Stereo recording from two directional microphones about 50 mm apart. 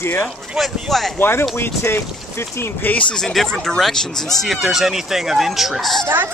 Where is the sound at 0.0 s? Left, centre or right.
Left.